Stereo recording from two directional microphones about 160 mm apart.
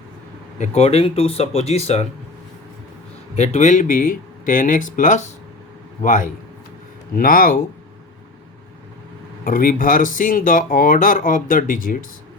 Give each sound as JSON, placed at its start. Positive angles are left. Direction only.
{"t": 0.6, "sound": "speech", "side_deg": 40}
{"t": 3.3, "sound": "a man's voice", "side_deg": 40}
{"t": 9.4, "sound": "speech", "side_deg": 60}